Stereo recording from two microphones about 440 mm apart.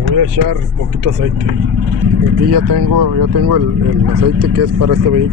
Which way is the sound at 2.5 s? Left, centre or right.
Right.